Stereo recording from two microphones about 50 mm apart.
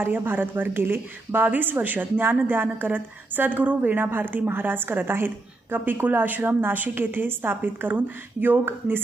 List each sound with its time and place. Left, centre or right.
0.0 s a woman's voice: right